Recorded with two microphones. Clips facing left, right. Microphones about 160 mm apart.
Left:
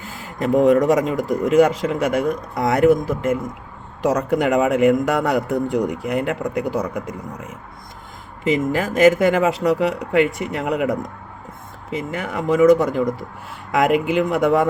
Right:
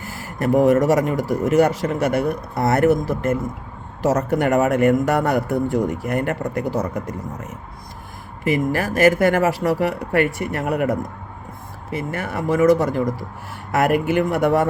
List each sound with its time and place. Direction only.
0.0 s a man's voice: 20° left (ahead or behind)
8.4 s a man's voice: 20° left (ahead or behind)